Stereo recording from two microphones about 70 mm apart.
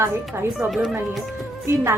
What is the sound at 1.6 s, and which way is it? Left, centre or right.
Speech, right.